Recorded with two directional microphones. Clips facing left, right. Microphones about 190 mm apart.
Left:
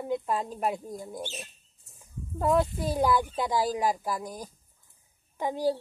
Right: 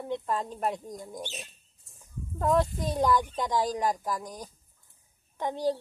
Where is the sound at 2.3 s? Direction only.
5° left (ahead or behind).